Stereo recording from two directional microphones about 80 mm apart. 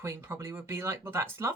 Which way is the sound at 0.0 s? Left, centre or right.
Right.